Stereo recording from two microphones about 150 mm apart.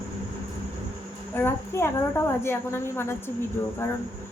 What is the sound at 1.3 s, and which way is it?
A woman's voice, 15° left (ahead or behind).